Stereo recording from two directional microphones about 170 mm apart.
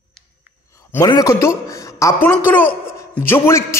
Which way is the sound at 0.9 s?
20° left (ahead or behind).